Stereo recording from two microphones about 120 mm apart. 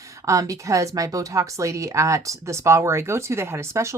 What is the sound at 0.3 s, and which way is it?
A woman's voice, 25° right (ahead or behind).